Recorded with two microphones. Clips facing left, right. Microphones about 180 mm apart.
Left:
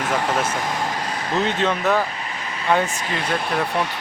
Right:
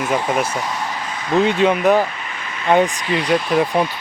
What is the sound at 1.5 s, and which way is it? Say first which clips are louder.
Speech: right 6 dB; 10° right (ahead or behind).